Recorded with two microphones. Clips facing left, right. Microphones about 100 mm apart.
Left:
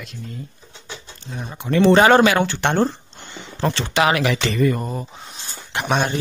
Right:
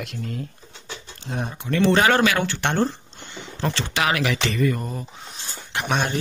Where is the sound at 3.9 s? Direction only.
30° left (ahead or behind).